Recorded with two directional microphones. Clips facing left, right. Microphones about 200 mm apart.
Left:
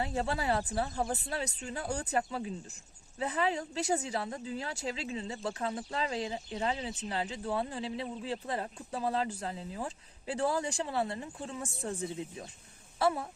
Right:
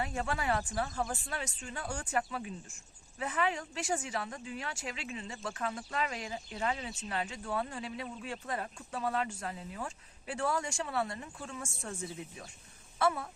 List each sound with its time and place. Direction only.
0.0 s speech: 30° left (ahead or behind)
1.9 s speech: 35° left (ahead or behind)